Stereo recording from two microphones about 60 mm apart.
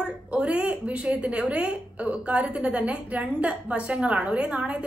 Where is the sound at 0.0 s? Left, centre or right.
Centre.